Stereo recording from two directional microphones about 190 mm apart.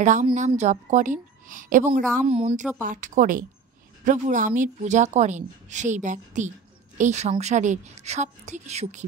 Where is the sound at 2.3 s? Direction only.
30° right (ahead or behind).